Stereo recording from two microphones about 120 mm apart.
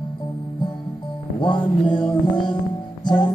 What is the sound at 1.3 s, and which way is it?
Music, 45° left (ahead or behind).